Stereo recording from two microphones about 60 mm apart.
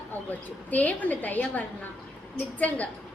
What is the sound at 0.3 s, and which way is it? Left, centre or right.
A woman's voice, left.